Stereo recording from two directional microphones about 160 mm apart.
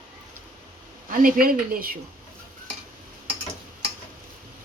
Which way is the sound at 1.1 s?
60° right (ahead or behind).